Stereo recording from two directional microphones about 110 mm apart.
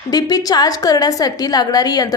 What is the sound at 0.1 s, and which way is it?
A woman's voice, 35° left (ahead or behind).